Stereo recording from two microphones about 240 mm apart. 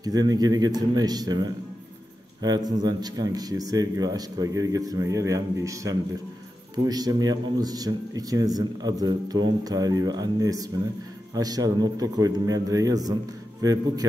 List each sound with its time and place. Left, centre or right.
0.0 s speech: centre